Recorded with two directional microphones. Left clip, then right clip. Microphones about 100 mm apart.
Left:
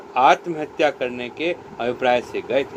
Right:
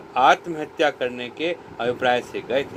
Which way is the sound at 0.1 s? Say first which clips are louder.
Left 1 dB; 55° right (ahead or behind).